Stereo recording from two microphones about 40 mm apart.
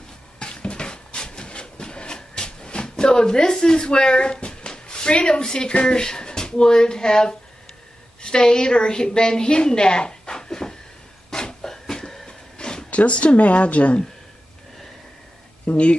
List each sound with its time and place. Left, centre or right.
0.4 s a sound: left
8.2 s a woman's voice: centre
11.2 s cough: centre
12.3 s a sound: centre
12.9 s speech: left
15.6 s speech: left